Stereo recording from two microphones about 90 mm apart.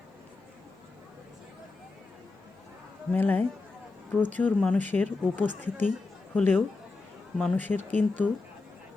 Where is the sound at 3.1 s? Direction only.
20° left (ahead or behind).